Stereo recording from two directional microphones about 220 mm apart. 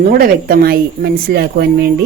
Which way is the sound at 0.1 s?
40° right (ahead or behind).